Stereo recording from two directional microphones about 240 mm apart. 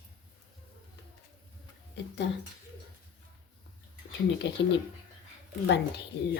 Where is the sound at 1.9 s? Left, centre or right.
Left.